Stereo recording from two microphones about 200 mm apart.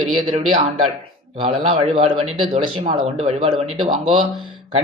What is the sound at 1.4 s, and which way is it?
A man's voice, 25° right (ahead or behind).